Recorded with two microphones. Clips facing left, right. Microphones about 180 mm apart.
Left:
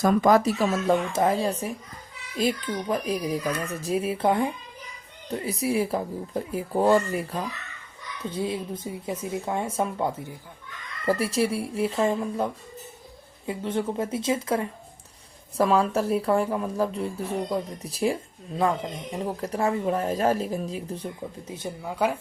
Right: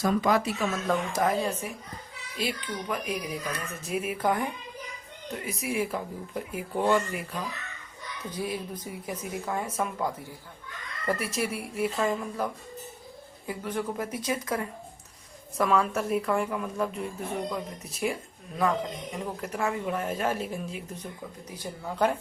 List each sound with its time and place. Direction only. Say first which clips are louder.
0.0 s speech: left 5 dB; 50° left (ahead or behind)
8.3 s speech: left 4 dB; 25° left (ahead or behind)
21.8 s speech: even; 10° left (ahead or behind)